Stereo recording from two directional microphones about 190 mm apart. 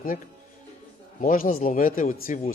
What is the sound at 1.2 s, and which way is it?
A man's voice, 45° left (ahead or behind).